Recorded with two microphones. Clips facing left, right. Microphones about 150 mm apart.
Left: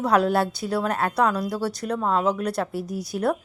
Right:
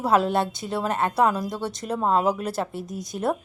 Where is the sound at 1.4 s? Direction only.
20° right (ahead or behind).